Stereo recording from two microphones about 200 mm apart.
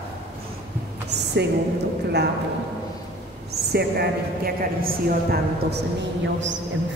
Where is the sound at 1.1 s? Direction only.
55° right (ahead or behind).